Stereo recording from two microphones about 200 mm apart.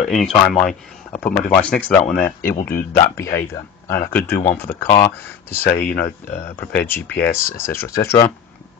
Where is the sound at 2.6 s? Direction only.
45° left (ahead or behind).